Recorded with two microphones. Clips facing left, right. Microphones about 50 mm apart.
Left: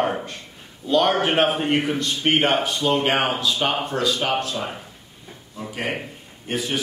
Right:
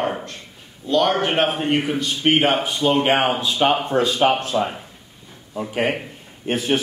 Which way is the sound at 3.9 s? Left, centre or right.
Right.